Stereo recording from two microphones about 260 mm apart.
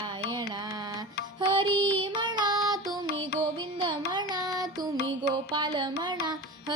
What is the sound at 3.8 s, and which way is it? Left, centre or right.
Carnatic music, centre.